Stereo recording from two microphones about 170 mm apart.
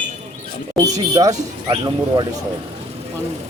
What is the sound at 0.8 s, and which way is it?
Speech, 20° right (ahead or behind).